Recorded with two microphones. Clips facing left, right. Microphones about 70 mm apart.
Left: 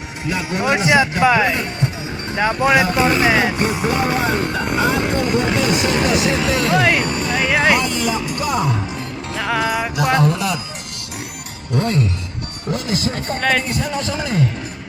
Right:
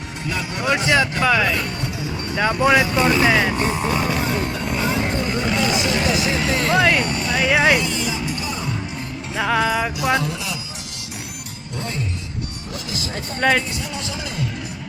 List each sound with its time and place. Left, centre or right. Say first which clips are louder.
0.3 s speech: left 3 dB; centre
2.6 s music: left 1 dB; centre
2.9 s speech: left 1 dB; centre
3.6 s speech: left 2 dB; left
4.2 s a sound: left 4 dB; left
5.5 s speech: left 3 dB; left
6.7 s music: even; centre
7.0 s speech: left 2 dB; left
7.3 s speech: even; centre
7.8 s music: left 4 dB; left
9.3 s music: right 1 dB; centre
10.2 s speech: left 7 dB; left
11.7 s speech: left 10 dB; left
12.7 s speech: left 8 dB; left